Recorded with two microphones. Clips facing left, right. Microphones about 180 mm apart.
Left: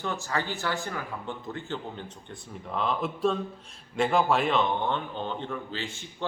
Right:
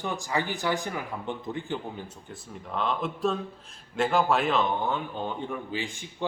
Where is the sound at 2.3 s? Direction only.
Centre (ahead or behind).